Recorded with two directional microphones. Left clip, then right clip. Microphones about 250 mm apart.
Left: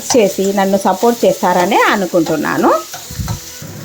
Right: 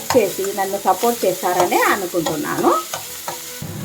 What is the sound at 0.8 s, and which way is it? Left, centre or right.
Speech, left.